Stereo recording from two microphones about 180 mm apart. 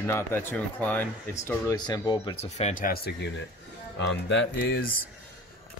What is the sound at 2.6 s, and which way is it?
Speech, 45° left (ahead or behind).